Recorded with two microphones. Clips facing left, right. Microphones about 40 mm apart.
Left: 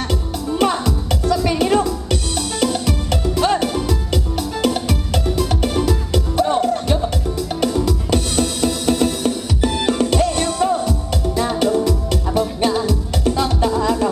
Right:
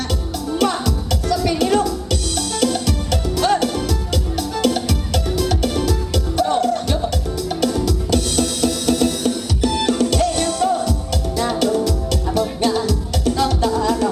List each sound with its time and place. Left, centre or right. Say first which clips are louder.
0.6 s music: left 1 dB; left